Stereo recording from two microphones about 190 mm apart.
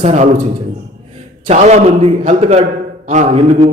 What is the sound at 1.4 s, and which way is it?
A man's voice, 35° right (ahead or behind).